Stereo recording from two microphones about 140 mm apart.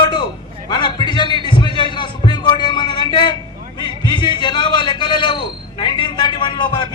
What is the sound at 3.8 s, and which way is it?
A man's voice, 35° left (ahead or behind).